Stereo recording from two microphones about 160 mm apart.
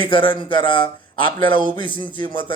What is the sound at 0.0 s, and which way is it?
Speech, 30° left (ahead or behind).